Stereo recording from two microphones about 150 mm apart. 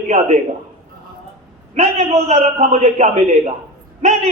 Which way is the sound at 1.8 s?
50° right (ahead or behind).